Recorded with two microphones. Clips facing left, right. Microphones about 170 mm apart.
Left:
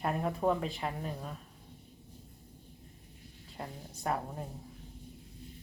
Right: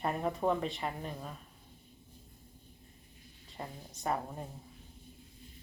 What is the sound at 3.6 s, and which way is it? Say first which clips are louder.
Speech: left 1 dB; centre (ahead or behind).